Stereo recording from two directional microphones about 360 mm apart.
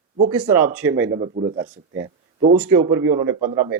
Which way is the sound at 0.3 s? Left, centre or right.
Right.